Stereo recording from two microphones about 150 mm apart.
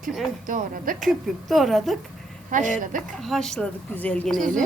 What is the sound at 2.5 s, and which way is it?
Speech, 60° right (ahead or behind).